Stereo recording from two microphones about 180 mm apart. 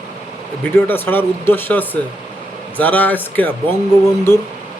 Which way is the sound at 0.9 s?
10° left (ahead or behind).